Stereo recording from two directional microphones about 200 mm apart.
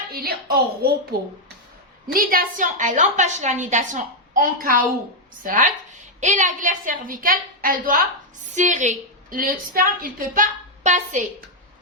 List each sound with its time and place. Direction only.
0.1 s a woman's voice: 50° right (ahead or behind)
2.1 s a woman's voice: 40° right (ahead or behind)